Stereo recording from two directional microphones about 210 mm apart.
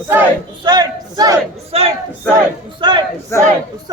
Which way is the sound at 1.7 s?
30° right (ahead or behind).